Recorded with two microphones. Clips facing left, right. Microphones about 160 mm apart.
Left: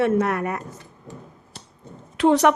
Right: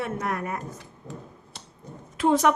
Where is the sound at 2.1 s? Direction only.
75° left (ahead or behind).